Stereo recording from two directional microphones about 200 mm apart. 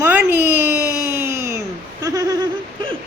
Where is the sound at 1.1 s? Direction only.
15° right (ahead or behind).